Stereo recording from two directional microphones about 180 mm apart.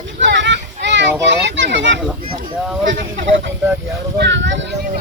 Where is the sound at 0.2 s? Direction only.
90° right.